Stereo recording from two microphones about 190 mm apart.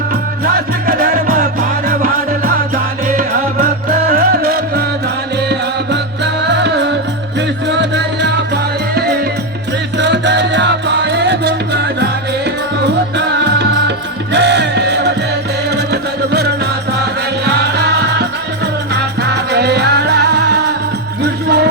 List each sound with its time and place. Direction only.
0.9 s music: 45° right (ahead or behind)
5.5 s music: 65° right (ahead or behind)
10.0 s music: 65° right (ahead or behind)
19.5 s music: 60° right (ahead or behind)